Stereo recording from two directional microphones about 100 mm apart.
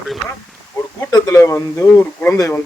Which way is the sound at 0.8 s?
30° left (ahead or behind).